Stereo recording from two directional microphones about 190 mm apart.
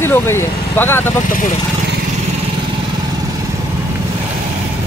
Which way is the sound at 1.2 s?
45° left (ahead or behind).